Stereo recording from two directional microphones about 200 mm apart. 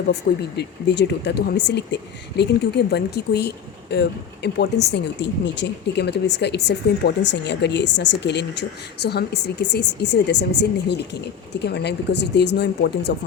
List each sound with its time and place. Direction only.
0.1 s speech: 55° left (ahead or behind)